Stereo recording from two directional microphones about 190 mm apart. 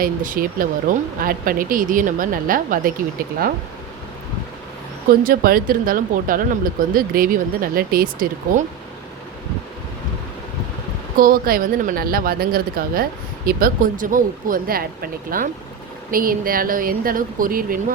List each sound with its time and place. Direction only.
0.0 s speech: 45° right (ahead or behind)
5.2 s speech: 50° right (ahead or behind)
11.2 s speech: 50° right (ahead or behind)